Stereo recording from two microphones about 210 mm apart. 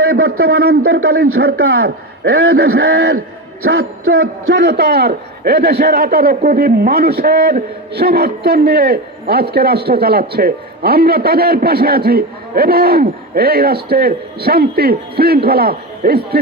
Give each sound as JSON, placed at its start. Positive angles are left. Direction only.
{"t": 0.1, "sound": "a sound", "side_deg": -50}
{"t": 0.4, "sound": "a man's voice", "side_deg": -50}
{"t": 4.4, "sound": "a man's voice", "side_deg": -55}